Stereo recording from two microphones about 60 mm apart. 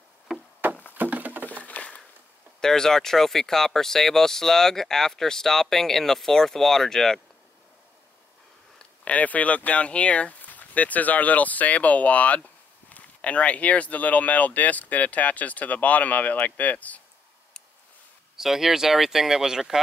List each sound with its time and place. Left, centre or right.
0.6 s a sound: right
0.9 s patter: right
1.6 s a sound: left
2.6 s speech: centre
8.7 s speech: left
18.3 s speech: centre